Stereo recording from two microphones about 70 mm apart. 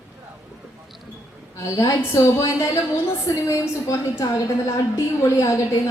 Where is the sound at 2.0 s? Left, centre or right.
Left.